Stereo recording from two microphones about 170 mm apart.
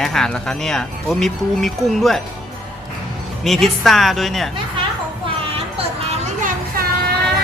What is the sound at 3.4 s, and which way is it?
Speech, centre (ahead or behind).